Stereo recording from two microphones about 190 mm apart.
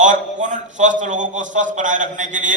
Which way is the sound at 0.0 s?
40° right (ahead or behind).